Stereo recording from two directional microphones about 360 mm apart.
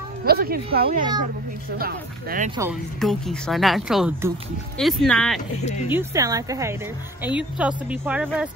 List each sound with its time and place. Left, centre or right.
0.2 s speech: right
2.6 s a woman's voice: centre
5.6 s speech: centre
5.9 s a woman's voice: centre